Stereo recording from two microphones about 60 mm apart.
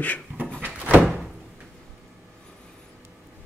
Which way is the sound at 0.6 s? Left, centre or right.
Right.